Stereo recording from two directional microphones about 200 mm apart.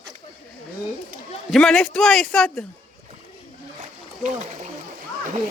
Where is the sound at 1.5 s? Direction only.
Centre (ahead or behind).